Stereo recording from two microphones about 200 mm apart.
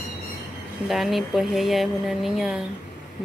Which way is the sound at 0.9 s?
Centre (ahead or behind).